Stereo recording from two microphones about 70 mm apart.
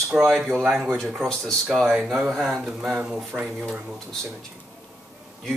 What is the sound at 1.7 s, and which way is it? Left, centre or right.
Speech, centre.